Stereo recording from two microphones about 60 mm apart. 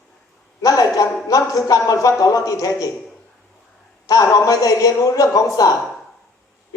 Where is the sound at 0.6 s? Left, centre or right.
Left.